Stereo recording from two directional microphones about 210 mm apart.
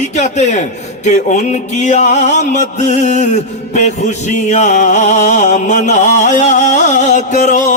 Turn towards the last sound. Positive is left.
turn(degrees=35)  # may be behind; listen again after turning